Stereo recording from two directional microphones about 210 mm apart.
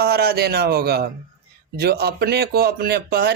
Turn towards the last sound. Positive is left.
turn(degrees=-50)  # may be behind; listen again after turning